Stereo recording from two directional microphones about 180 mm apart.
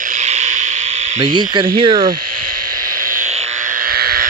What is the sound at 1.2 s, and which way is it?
Speech, 25° right (ahead or behind).